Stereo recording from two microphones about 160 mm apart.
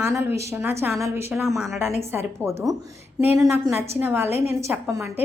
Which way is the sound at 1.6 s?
Centre (ahead or behind).